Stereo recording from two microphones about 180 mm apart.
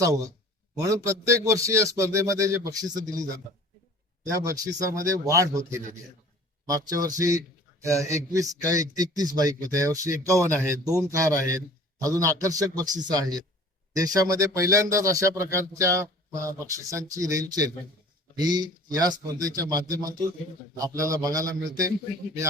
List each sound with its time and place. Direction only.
0.8 s speech: 15° right (ahead or behind)